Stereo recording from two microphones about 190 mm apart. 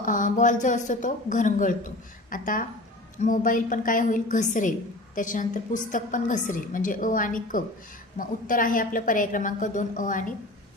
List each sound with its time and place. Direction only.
0.0 s a woman's voice: 45° left (ahead or behind)